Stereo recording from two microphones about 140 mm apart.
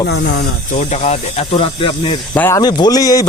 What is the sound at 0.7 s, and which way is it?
Speech, 55° left (ahead or behind).